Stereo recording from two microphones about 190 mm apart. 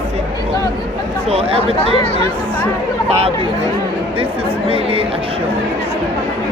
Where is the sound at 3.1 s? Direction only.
30° right (ahead or behind).